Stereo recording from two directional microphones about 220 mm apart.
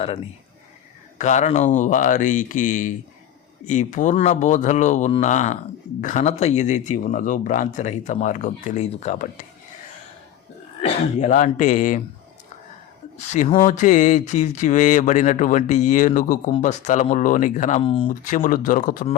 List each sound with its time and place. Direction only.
1.2 s speech: 30° left (ahead or behind)
10.8 s speech: 35° left (ahead or behind)
13.1 s speech: 30° left (ahead or behind)
18.1 s speech: 35° left (ahead or behind)